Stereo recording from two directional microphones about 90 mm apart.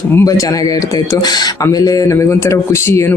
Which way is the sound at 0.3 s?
40° left (ahead or behind).